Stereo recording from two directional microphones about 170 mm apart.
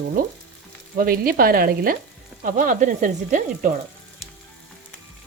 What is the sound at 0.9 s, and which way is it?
Frying, 60° right (ahead or behind).